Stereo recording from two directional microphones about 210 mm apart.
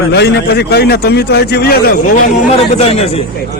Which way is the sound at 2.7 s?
30° left (ahead or behind).